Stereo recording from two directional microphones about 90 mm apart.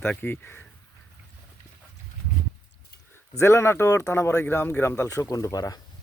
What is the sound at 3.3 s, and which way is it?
Speech, 30° left (ahead or behind).